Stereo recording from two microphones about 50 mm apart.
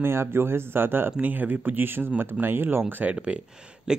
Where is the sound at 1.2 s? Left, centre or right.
Right.